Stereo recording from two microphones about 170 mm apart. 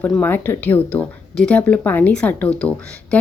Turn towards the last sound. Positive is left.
turn(degrees=10)  # may be behind; listen again after turning